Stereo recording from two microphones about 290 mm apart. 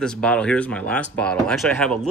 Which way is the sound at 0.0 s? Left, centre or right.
Centre.